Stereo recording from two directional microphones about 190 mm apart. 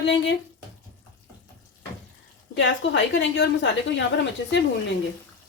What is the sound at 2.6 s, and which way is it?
A woman's voice, 75° left (ahead or behind).